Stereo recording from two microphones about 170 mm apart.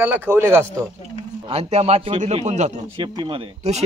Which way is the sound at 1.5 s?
40° right (ahead or behind).